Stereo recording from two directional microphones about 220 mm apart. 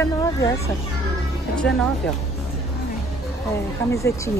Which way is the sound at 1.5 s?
5° left (ahead or behind).